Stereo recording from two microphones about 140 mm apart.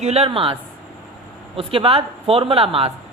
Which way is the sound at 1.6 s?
40° right (ahead or behind).